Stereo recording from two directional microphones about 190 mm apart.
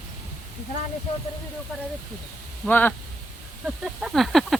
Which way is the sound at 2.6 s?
10° left (ahead or behind).